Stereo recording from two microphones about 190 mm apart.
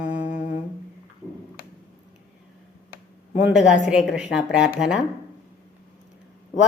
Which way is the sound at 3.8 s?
5° right (ahead or behind).